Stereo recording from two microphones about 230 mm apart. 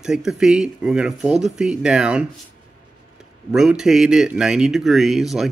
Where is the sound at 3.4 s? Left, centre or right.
Centre.